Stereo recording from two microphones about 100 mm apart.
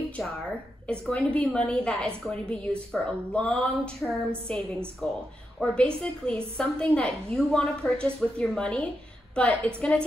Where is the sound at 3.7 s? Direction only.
Centre (ahead or behind).